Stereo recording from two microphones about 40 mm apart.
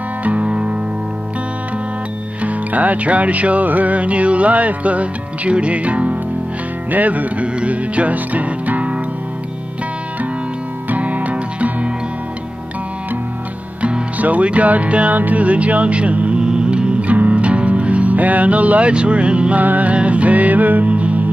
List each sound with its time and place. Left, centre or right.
0.2 s music: right
2.4 s music: right
10.9 s music: right
13.7 s music: right
16.3 s music: right
17.1 s music: right
19.6 s music: right